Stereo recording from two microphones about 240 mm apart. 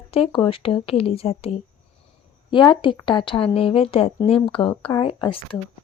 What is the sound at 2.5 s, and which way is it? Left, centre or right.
A woman's voice, centre.